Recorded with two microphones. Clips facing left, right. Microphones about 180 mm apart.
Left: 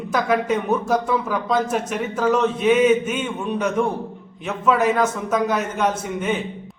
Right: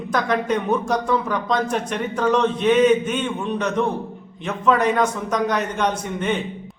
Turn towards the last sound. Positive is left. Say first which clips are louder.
# even
turn(degrees=5)  # may be behind; listen again after turning